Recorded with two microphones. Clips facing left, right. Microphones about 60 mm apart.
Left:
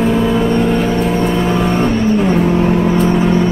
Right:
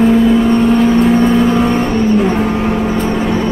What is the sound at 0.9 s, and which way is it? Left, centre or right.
Vehicle, right.